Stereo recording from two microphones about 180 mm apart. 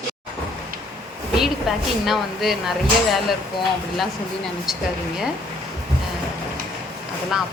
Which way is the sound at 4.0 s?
Centre (ahead or behind).